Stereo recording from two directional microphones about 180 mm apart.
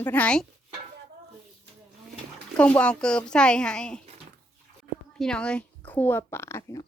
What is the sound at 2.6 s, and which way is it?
Speech, 5° left (ahead or behind).